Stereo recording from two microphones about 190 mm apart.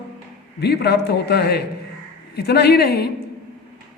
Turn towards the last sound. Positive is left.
turn(degrees=60)  # may be behind; listen again after turning